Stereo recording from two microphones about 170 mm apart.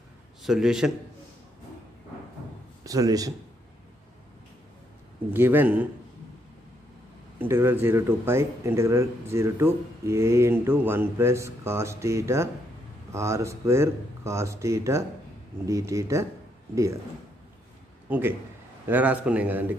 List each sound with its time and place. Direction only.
0.4 s a man's voice: 5° right (ahead or behind)
2.8 s speech: 20° right (ahead or behind)
5.3 s speech: 10° right (ahead or behind)
7.3 s speech: 15° right (ahead or behind)
18.9 s speech: 10° right (ahead or behind)